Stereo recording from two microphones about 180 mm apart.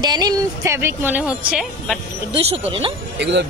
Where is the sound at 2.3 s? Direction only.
35° right (ahead or behind).